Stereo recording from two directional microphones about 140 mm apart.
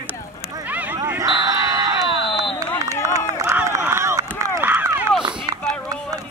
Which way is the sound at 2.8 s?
20° right (ahead or behind).